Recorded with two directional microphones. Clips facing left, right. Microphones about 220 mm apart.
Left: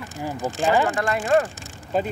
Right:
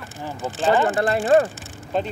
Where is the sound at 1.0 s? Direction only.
30° right (ahead or behind).